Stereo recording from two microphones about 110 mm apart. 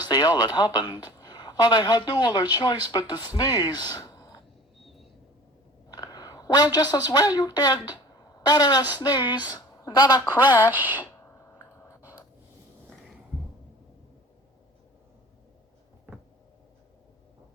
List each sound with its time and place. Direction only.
0.0 s speech: 40° left (ahead or behind)
5.9 s a woman's voice: 35° left (ahead or behind)
10.6 s a woman's voice: 15° right (ahead or behind)
16.1 s cupboard open or close: 20° right (ahead or behind)